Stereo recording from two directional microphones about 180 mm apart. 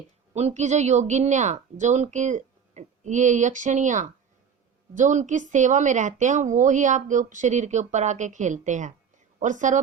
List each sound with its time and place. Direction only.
0.3 s a woman's voice: 40° right (ahead or behind)